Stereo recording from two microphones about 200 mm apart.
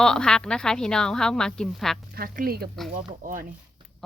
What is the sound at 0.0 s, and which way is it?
A woman's voice, 5° left (ahead or behind).